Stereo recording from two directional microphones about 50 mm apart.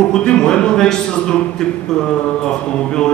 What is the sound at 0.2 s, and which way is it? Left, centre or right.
Speech, centre.